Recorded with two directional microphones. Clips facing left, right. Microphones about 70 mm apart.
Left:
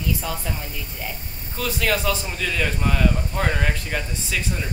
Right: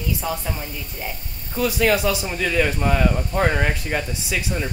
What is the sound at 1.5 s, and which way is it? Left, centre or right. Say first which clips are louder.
A man's voice: right 5 dB; centre.